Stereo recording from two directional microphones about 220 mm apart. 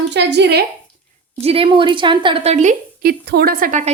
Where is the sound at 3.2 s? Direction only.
45° right (ahead or behind).